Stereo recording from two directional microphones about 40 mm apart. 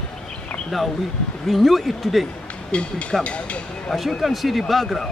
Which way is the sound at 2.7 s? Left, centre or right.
Left.